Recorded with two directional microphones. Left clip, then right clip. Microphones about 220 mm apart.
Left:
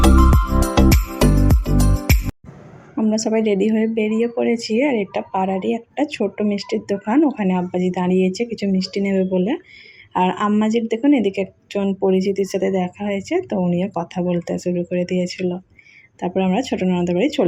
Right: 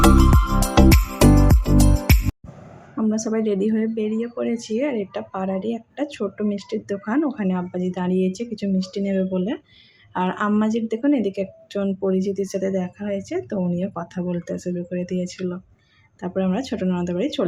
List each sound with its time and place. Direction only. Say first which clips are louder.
0.0 s music: even; centre (ahead or behind)
3.0 s speech: left 4 dB; 10° left (ahead or behind)